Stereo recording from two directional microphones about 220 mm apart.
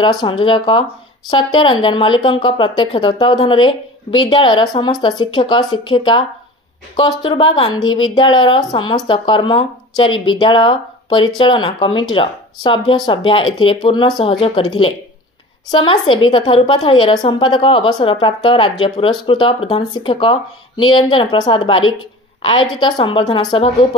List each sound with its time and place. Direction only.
0.0 s a woman's voice: 20° left (ahead or behind)